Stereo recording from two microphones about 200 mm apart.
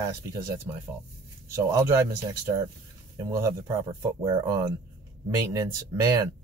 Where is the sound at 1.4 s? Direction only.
15° right (ahead or behind).